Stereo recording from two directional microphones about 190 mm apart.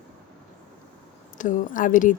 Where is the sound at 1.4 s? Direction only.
45° left (ahead or behind).